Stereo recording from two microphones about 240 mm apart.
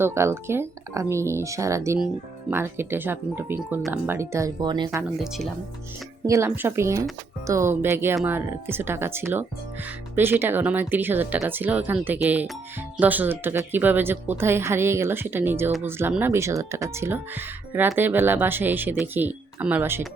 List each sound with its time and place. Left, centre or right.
0.0 s speech: centre
4.9 s speech: centre